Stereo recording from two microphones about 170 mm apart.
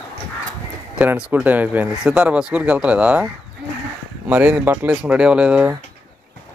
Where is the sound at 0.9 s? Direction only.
5° right (ahead or behind).